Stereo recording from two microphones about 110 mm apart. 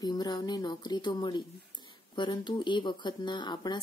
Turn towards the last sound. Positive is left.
turn(degrees=45)  # may be behind; listen again after turning